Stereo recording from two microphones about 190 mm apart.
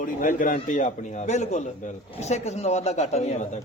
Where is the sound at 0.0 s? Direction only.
45° left (ahead or behind).